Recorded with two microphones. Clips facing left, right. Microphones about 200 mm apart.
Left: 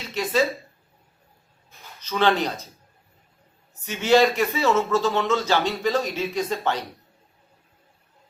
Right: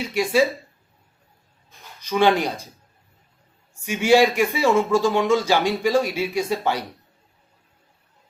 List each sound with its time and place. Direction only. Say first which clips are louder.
0.0 s a man's voice: right 3 dB; 10° right (ahead or behind)
2.0 s speech: right 3 dB; 10° right (ahead or behind)
3.8 s a man's voice: right 2 dB; 10° right (ahead or behind)